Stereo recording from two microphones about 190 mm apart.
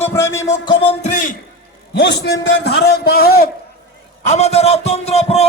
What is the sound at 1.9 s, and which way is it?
A man's voice, 65° left (ahead or behind).